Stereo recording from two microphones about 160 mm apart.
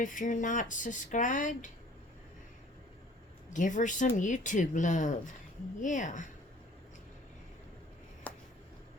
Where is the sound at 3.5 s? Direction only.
50° left (ahead or behind).